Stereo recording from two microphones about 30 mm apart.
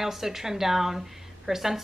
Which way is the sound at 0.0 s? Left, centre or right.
Centre.